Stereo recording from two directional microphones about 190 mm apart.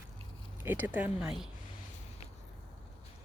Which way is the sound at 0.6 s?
10° right (ahead or behind).